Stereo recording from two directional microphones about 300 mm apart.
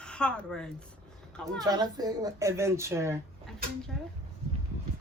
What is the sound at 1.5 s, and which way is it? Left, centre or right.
Speech, centre.